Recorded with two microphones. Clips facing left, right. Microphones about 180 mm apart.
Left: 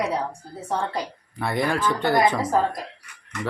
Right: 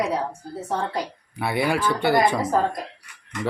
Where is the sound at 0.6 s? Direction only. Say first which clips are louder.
Even; 5° right (ahead or behind).